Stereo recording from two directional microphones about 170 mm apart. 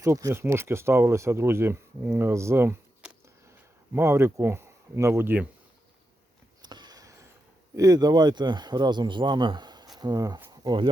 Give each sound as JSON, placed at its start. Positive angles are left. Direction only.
{"t": 0.0, "sound": "speech", "side_deg": -15}
{"t": 3.9, "sound": "speech", "side_deg": -15}
{"t": 6.6, "sound": "a sound", "side_deg": -25}
{"t": 7.8, "sound": "speech", "side_deg": -20}